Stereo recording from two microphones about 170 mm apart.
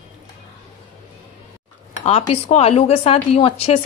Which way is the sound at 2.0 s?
35° left (ahead or behind).